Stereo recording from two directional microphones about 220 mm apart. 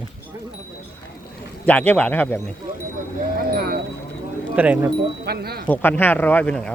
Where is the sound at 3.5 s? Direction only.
45° right (ahead or behind).